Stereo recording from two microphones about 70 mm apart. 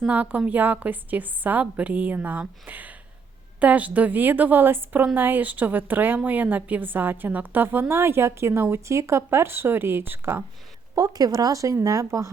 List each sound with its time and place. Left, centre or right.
0.1 s a woman's voice: right
10.9 s speech: right